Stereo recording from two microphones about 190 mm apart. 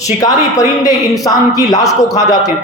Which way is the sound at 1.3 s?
20° left (ahead or behind).